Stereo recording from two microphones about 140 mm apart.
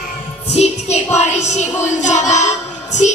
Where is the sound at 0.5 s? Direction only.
55° left (ahead or behind).